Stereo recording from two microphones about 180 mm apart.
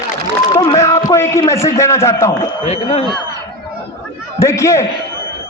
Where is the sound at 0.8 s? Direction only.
15° left (ahead or behind).